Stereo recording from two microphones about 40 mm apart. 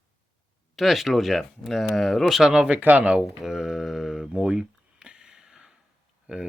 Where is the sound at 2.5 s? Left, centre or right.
Right.